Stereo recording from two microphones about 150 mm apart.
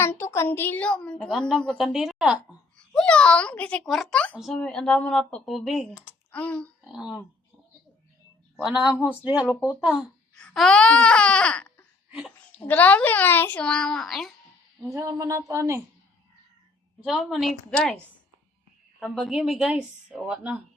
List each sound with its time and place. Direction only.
0.0 s a woman's voice: 15° left (ahead or behind); by 2.6 s 5° right (ahead or behind)
2.7 s a woman's voice: 5° left (ahead or behind)
6.8 s a woman's voice: 5° right (ahead or behind)
8.6 s a woman's voice: 5° right (ahead or behind)
9.9 s a woman's voice: 5° left (ahead or behind)
14.9 s speech: 20° right (ahead or behind)
17.0 s a woman's voice: 5° right (ahead or behind)